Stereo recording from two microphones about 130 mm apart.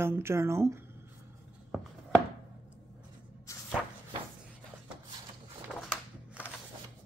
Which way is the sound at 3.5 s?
25° left (ahead or behind).